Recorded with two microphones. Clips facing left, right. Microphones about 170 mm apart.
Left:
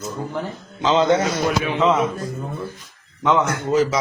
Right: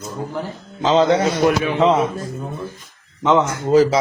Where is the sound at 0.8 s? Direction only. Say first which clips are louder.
Right 2 dB; 40° right (ahead or behind).